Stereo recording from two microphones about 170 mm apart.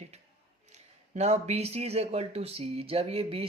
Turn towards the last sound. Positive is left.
turn(degrees=-35)  # may be behind; listen again after turning